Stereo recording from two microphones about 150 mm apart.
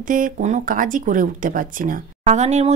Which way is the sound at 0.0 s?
65° right (ahead or behind).